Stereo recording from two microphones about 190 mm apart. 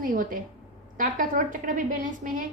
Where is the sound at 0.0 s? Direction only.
45° right (ahead or behind).